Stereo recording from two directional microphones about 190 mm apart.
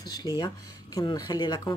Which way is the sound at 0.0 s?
20° left (ahead or behind).